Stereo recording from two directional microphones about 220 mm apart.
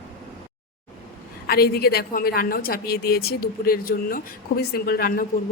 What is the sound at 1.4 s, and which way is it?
A woman's voice, 45° left (ahead or behind).